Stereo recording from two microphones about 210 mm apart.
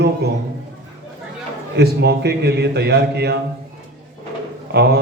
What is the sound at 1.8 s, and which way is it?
A man's voice, 55° right (ahead or behind).